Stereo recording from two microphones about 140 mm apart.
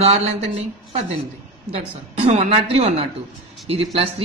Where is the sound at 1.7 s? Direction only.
45° right (ahead or behind).